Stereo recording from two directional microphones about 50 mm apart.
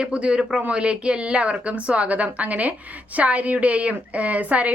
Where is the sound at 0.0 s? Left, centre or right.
Right.